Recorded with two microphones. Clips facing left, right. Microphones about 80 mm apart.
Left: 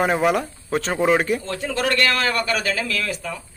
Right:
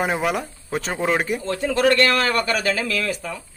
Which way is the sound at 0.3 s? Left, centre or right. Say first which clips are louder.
Left 3 dB; centre.